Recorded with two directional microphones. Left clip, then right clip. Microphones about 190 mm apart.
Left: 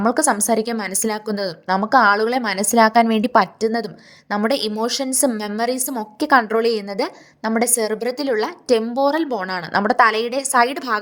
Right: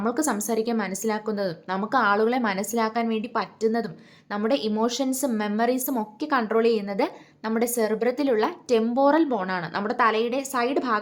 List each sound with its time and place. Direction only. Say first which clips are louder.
0.0 s a woman's voice: left 8 dB; 40° left (ahead or behind)